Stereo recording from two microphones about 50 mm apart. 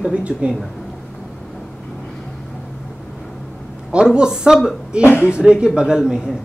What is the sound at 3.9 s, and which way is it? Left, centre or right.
Speech, centre.